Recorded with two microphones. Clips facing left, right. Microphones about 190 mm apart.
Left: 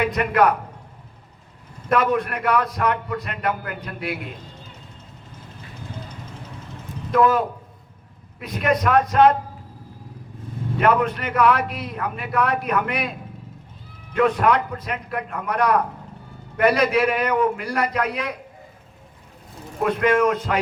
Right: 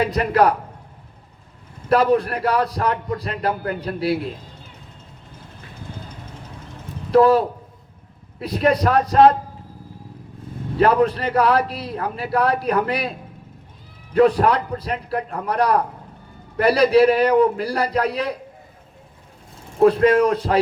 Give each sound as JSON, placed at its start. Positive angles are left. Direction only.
{"t": 0.0, "sound": "a man's voice", "side_deg": -35}
{"t": 1.9, "sound": "a man's voice", "side_deg": -35}
{"t": 7.1, "sound": "a man's voice", "side_deg": -35}
{"t": 10.8, "sound": "a man's voice", "side_deg": -35}
{"t": 19.8, "sound": "a man's voice", "side_deg": -35}